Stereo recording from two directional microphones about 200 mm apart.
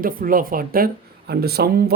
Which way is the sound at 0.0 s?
45° right (ahead or behind).